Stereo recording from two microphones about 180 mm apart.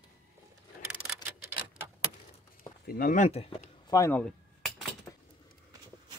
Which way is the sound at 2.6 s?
55° left (ahead or behind).